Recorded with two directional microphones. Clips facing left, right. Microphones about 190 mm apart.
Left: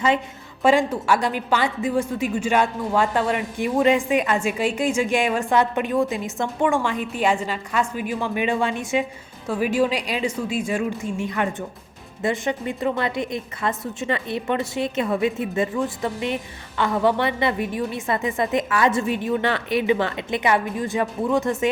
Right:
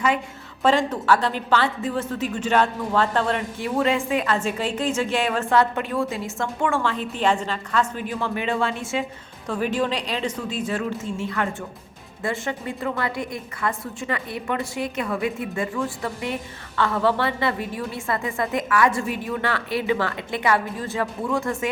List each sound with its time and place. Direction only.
0.6 s a woman's voice: 10° left (ahead or behind)